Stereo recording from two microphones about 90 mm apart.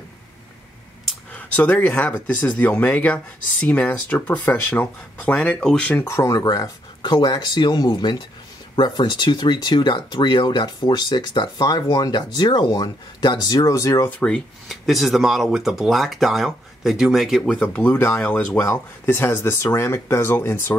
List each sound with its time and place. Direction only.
1.3 s speech: 15° left (ahead or behind)
5.9 s speech: 30° left (ahead or behind)
7.0 s speech: 55° left (ahead or behind); by 14.0 s 35° left (ahead or behind)
14.2 s speech: 5° left (ahead or behind)
17.6 s speech: 15° left (ahead or behind)